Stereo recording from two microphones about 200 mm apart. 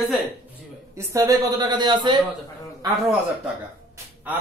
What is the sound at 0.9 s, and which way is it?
A man's voice, 15° right (ahead or behind).